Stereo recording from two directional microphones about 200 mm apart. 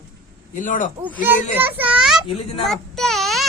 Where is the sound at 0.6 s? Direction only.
40° left (ahead or behind).